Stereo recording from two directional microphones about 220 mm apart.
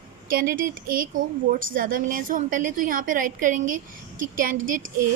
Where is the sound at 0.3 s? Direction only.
40° right (ahead or behind).